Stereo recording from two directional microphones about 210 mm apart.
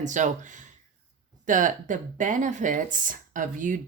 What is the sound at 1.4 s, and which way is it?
Speech, 40° right (ahead or behind).